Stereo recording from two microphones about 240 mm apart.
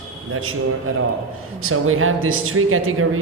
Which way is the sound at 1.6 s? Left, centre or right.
Right.